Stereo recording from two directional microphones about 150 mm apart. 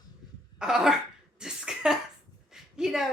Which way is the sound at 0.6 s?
5° right (ahead or behind).